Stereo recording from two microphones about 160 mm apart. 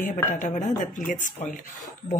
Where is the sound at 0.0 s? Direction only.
55° left (ahead or behind).